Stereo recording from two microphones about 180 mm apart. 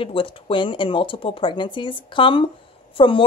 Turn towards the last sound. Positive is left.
turn(degrees=30)  # may be behind; listen again after turning